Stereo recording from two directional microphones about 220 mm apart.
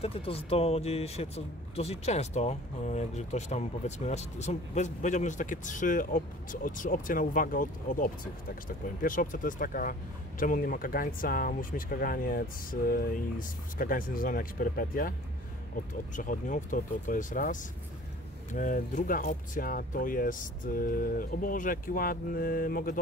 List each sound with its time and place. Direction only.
0.0 s speech: 25° left (ahead or behind)